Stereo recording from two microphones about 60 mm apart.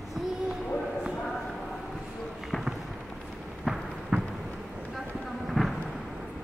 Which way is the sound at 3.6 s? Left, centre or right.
Centre.